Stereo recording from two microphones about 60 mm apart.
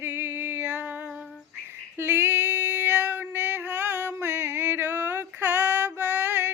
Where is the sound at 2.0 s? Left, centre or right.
Right.